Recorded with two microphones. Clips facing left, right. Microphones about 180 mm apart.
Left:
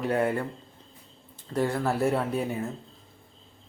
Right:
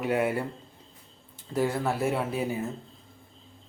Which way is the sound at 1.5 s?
Centre (ahead or behind).